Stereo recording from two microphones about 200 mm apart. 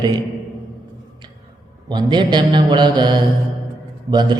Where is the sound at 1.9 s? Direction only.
20° right (ahead or behind).